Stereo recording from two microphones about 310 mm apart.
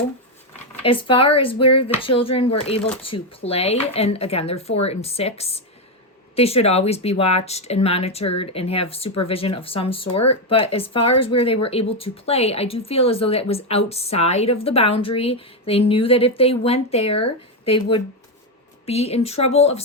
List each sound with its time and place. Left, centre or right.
0.8 s speech: centre
1.6 s speech: left
2.0 s speech: centre